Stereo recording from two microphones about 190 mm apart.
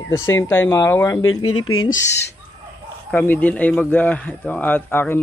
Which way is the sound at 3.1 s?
10° left (ahead or behind).